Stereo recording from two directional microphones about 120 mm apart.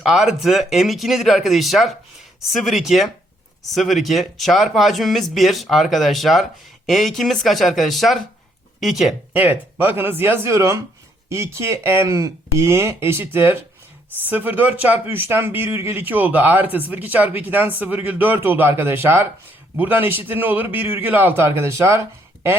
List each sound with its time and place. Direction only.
0.0 s speech: 5° right (ahead or behind)
9.3 s a man's voice: 15° right (ahead or behind)